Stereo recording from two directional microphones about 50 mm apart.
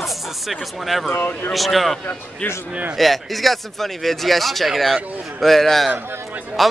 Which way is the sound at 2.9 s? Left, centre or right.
Centre.